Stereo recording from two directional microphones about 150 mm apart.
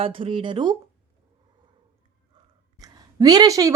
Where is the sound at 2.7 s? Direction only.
25° right (ahead or behind).